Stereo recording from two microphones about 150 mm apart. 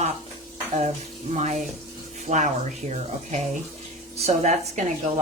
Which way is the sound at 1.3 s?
50° right (ahead or behind).